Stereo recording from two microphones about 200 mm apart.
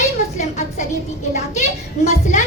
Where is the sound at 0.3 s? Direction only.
35° left (ahead or behind).